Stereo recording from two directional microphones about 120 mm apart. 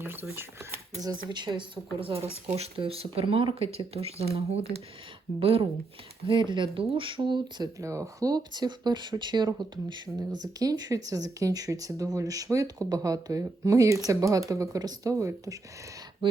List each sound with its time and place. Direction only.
0.0 s speech: 20° right (ahead or behind)
1.0 s speech: 40° right (ahead or behind)
6.2 s speech: 40° right (ahead or behind)
7.8 s speech: 25° right (ahead or behind)
16.2 s speech: 45° right (ahead or behind)